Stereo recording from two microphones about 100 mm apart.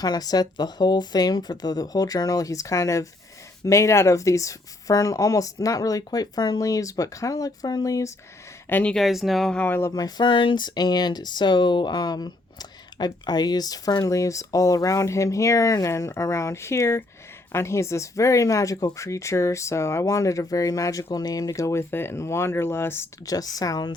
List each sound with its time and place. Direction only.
0.0 s speech: 40° left (ahead or behind)
8.7 s speech: 15° left (ahead or behind)
9.0 s speech: centre (ahead or behind)
9.6 s speech: 20° left (ahead or behind)
9.9 s speech: 45° left (ahead or behind); by 23.0 s 25° left (ahead or behind)
23.2 s speech: 35° left (ahead or behind)